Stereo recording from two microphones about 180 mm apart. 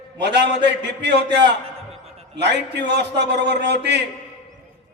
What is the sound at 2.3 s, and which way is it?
A man's voice, 70° right (ahead or behind).